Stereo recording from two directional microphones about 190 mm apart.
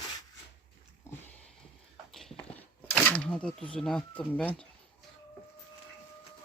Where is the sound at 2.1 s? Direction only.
Centre (ahead or behind).